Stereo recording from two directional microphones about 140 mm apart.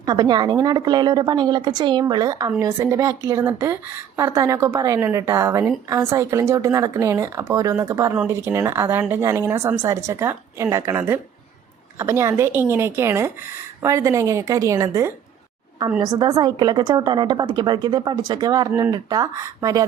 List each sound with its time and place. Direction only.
0.0 s a woman's voice: 30° right (ahead or behind)